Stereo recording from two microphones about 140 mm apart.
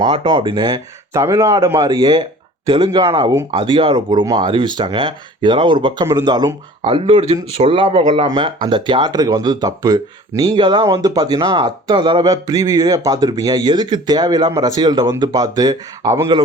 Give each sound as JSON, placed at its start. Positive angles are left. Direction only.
{"t": 0.1, "sound": "speech", "side_deg": -35}
{"t": 6.8, "sound": "speech", "side_deg": -40}